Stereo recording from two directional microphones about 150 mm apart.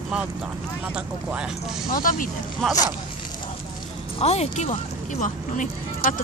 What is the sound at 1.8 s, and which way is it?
Speech, 65° left (ahead or behind).